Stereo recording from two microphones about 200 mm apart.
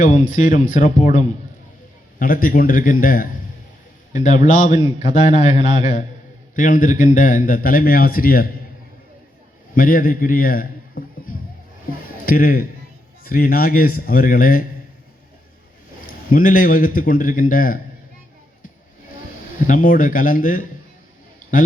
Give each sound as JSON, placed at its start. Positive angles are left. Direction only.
{"t": 0.0, "sound": "a man's voice", "side_deg": 40}
{"t": 9.7, "sound": "a man's voice", "side_deg": 45}
{"t": 16.3, "sound": "a man's voice", "side_deg": 45}
{"t": 19.6, "sound": "a man's voice", "side_deg": 40}